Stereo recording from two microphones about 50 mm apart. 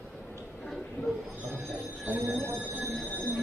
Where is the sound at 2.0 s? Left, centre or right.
Right.